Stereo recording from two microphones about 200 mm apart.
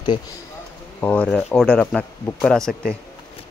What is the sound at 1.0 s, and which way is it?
Speech, 5° left (ahead or behind).